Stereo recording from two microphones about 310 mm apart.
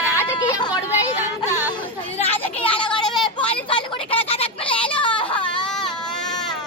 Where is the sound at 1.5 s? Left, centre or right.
Centre.